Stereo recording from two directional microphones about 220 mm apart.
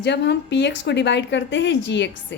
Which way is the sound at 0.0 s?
50° left (ahead or behind).